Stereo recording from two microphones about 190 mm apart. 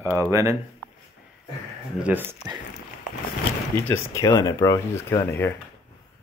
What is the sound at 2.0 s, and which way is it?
Speech, 5° right (ahead or behind).